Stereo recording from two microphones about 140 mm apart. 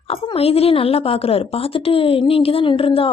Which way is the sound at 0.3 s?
45° left (ahead or behind).